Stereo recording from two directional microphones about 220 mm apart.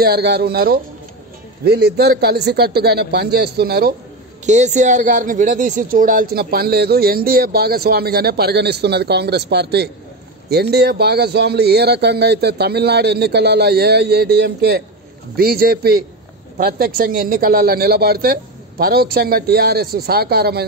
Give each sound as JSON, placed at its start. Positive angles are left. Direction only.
{"t": 0.0, "sound": "speech", "side_deg": -45}
{"t": 4.5, "sound": "speech", "side_deg": -30}